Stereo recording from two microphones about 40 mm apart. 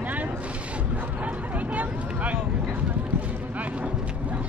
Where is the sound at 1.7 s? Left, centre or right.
Right.